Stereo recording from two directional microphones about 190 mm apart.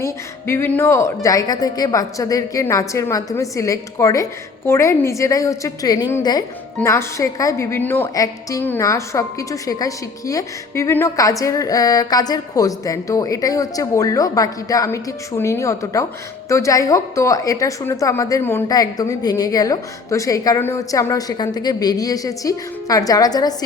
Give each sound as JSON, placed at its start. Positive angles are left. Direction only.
{"t": 0.0, "sound": "a woman's voice", "side_deg": 15}